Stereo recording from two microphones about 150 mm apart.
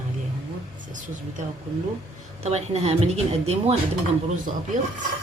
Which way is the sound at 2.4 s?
45° right (ahead or behind).